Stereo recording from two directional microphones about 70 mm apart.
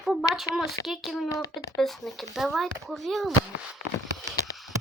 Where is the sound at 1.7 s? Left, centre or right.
Centre.